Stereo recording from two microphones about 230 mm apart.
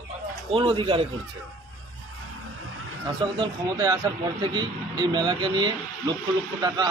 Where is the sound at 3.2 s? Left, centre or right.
Centre.